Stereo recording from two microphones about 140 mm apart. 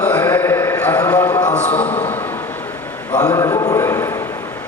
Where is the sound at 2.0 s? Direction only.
15° left (ahead or behind).